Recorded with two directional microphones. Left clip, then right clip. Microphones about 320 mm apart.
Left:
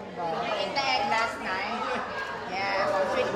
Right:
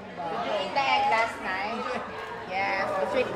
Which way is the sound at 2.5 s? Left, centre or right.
Right.